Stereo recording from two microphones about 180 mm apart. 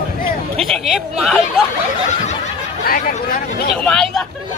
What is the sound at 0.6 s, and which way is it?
Speech, centre (ahead or behind).